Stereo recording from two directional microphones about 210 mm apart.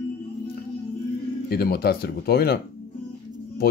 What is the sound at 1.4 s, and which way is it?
Speech, 50° left (ahead or behind).